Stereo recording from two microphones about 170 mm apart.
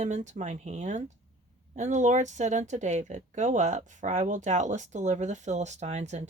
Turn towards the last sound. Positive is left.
turn(degrees=-40)  # may be behind; listen again after turning